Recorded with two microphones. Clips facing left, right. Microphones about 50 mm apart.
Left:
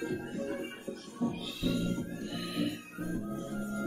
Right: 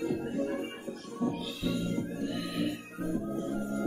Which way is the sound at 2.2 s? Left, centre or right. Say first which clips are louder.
Even; centre.